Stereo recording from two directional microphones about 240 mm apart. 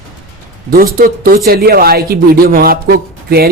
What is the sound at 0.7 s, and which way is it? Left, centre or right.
Speech, right.